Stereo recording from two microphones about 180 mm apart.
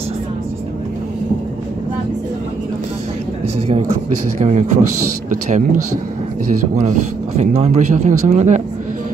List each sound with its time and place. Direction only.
4.4 s a man's voice: 40° right (ahead or behind)
6.8 s a man's voice: 40° right (ahead or behind)